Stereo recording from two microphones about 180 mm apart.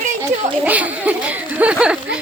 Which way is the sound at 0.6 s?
10° right (ahead or behind).